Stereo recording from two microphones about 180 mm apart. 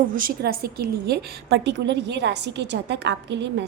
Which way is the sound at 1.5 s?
75° right (ahead or behind).